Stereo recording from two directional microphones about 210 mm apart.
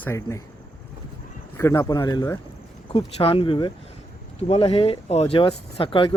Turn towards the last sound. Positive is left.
turn(degrees=25)  # may be behind; listen again after turning